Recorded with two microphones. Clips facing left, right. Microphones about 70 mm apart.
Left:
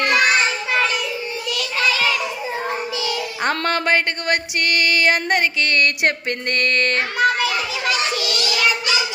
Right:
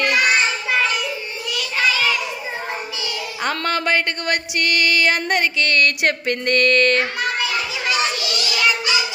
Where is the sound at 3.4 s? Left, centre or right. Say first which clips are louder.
Left 1 dB; left.